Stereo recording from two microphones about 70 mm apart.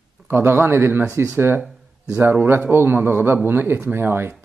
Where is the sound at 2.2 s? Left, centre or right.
Right.